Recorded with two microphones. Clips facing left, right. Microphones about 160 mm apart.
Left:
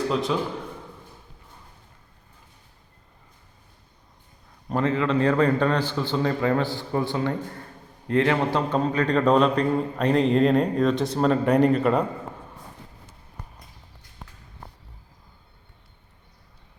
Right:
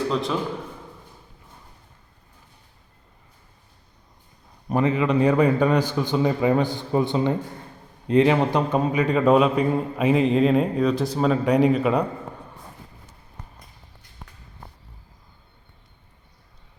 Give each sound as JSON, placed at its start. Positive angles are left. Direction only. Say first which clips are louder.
{"t": 0.1, "sound": "a man's voice", "louder": "even", "side_deg": 0}
{"t": 4.7, "sound": "a man's voice", "louder": "right 2 dB", "side_deg": -15}